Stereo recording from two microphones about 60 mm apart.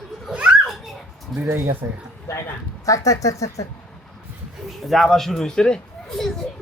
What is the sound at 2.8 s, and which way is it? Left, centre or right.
Speech, left.